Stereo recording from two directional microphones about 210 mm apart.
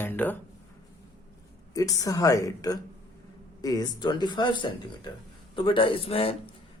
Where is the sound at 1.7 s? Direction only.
15° left (ahead or behind).